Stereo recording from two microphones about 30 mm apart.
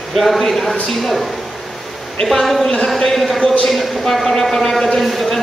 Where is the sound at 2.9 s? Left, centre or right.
Centre.